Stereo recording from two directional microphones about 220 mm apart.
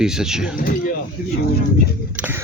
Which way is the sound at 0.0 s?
5° right (ahead or behind).